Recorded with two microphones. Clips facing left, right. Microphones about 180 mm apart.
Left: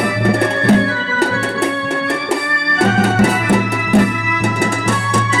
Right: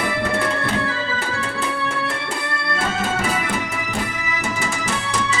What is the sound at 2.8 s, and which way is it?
Music, 70° left (ahead or behind).